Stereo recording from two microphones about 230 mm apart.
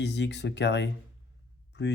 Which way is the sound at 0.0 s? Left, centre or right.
Left.